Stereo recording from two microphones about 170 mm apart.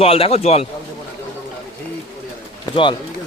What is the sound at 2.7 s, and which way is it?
Speech, 30° left (ahead or behind).